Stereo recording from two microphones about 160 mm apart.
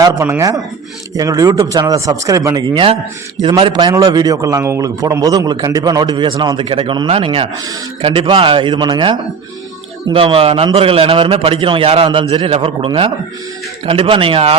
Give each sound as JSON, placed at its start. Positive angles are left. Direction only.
{"t": 0.0, "sound": "a man's voice", "side_deg": -15}